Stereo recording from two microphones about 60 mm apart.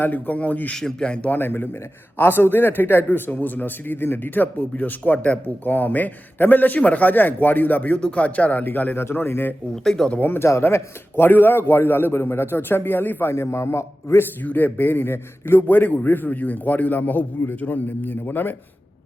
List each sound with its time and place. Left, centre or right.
0.0 s a man's voice: left
0.7 s speech: centre
1.3 s a man's voice: left
9.0 s a man's voice: left
9.7 s speech: centre
10.1 s a man's voice: left
10.6 s a man's voice: left
11.3 s a man's voice: left
13.3 s a man's voice: left
14.4 s a man's voice: left
15.6 s a man's voice: left